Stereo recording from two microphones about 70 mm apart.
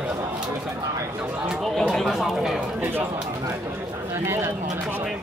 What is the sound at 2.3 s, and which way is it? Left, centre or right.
Speech, centre.